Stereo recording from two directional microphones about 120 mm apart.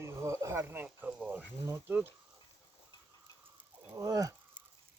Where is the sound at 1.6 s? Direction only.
25° right (ahead or behind).